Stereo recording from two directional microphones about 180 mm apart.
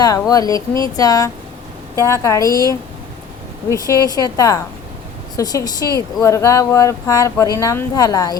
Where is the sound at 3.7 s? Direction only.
20° left (ahead or behind).